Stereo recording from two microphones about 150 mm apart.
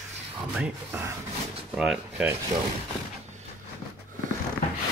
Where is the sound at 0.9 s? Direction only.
20° right (ahead or behind).